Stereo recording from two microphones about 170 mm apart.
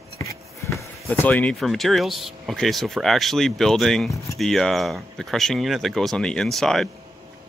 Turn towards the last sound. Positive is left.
turn(degrees=0)  # may be behind; listen again after turning